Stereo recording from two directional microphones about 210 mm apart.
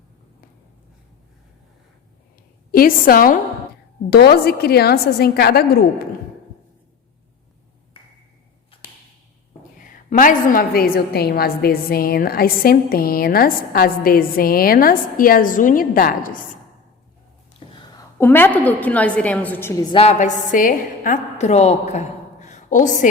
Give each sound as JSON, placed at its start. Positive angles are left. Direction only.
{"t": 2.7, "sound": "a woman's voice", "side_deg": 45}
{"t": 9.7, "sound": "a woman's voice", "side_deg": 40}
{"t": 17.7, "sound": "a woman's voice", "side_deg": 15}
{"t": 19.9, "sound": "a woman's voice", "side_deg": 30}